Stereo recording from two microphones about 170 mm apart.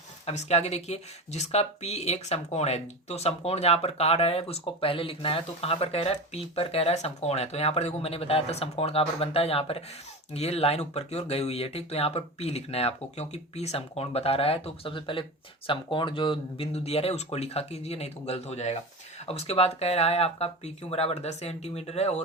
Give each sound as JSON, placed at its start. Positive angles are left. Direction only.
{"t": 0.3, "sound": "speech", "side_deg": 40}